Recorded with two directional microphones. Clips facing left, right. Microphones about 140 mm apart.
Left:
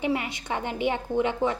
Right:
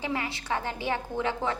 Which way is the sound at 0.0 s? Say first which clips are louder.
Left 4 dB; 20° left (ahead or behind).